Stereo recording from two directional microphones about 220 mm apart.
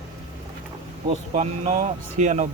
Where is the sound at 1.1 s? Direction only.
30° right (ahead or behind).